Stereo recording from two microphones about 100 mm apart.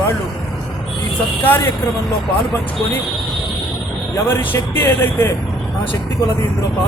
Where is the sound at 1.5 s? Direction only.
20° left (ahead or behind).